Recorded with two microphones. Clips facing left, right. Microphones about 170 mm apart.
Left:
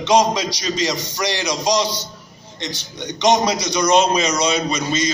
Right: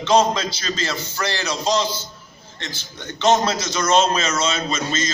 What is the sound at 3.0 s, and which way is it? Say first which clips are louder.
A man's voice: left 1 dB; 15° left (ahead or behind).